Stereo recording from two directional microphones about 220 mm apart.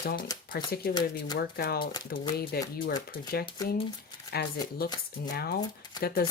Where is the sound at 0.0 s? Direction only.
45° left (ahead or behind).